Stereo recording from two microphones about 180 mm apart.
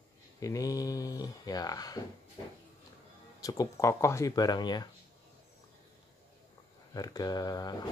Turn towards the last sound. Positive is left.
turn(degrees=20)  # may be behind; listen again after turning